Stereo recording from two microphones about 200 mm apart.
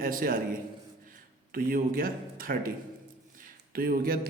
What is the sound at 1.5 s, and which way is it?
A man's voice, 45° right (ahead or behind).